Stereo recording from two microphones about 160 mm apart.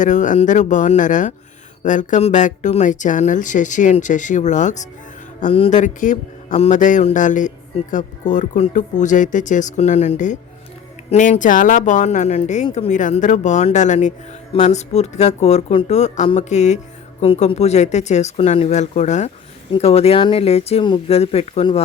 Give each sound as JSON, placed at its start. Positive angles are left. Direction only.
{"t": 0.0, "sound": "speech", "side_deg": 50}
{"t": 5.5, "sound": "speech", "side_deg": 35}
{"t": 5.7, "sound": "speech", "side_deg": 50}